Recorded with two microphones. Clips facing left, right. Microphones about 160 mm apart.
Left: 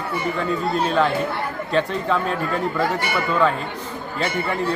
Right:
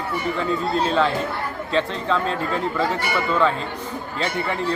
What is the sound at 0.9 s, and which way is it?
A man's voice, 5° left (ahead or behind).